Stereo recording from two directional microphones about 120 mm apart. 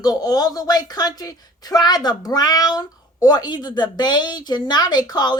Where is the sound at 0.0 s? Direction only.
35° left (ahead or behind).